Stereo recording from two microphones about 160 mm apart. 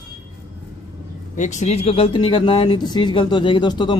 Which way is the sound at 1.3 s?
50° left (ahead or behind).